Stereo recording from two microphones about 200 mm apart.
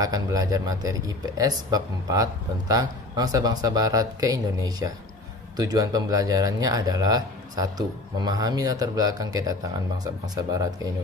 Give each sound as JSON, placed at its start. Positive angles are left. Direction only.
{"t": 0.0, "sound": "speech", "side_deg": -20}